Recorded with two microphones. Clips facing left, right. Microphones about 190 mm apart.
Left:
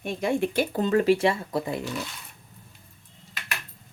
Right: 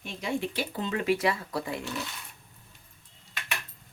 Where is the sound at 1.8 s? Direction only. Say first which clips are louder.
Left 3 dB; centre (ahead or behind).